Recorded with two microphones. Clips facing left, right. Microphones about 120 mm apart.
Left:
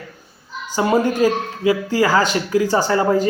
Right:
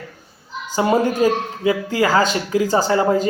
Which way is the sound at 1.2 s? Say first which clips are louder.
Even; 20° right (ahead or behind).